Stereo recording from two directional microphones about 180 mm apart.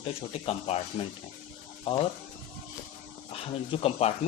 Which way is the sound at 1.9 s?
30° left (ahead or behind).